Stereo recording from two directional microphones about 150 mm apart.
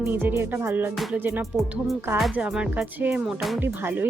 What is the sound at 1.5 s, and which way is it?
Speech, centre (ahead or behind).